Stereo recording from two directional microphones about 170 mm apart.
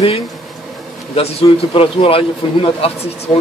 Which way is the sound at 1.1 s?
35° left (ahead or behind).